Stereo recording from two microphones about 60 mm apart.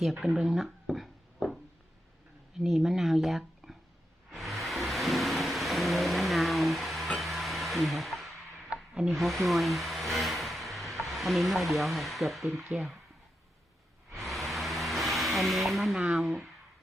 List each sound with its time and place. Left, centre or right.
0.0 s a sound: centre
2.6 s speech: centre
4.3 s vehicle: centre
9.0 s speech: centre
14.2 s vehicle: centre
16.1 s speech: centre